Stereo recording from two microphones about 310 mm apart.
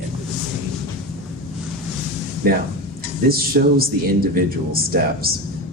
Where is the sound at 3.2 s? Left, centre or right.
Right.